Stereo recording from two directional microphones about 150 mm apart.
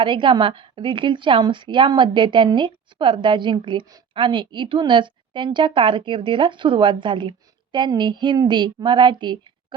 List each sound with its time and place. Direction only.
0.0 s a woman's voice: 35° right (ahead or behind)